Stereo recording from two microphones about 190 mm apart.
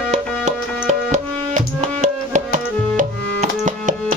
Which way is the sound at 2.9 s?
40° right (ahead or behind).